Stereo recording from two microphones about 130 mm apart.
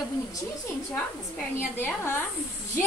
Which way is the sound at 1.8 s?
15° left (ahead or behind).